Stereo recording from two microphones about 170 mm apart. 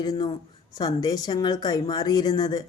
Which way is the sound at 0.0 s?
25° left (ahead or behind).